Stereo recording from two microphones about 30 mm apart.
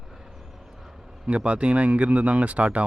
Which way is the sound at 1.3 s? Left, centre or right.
Right.